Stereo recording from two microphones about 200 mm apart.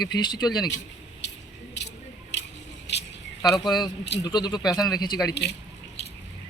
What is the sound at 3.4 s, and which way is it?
Speech, 20° left (ahead or behind).